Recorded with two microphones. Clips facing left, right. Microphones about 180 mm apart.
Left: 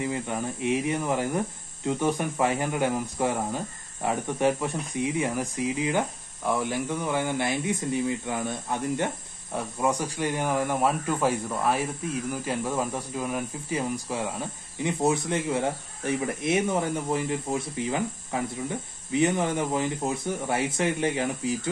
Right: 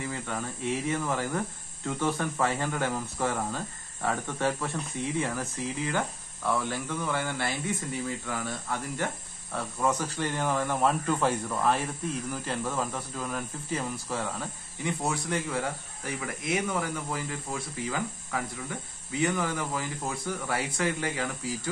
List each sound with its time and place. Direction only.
0.0 s speech: 20° left (ahead or behind)